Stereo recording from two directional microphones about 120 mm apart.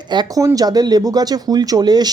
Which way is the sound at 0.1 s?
35° right (ahead or behind).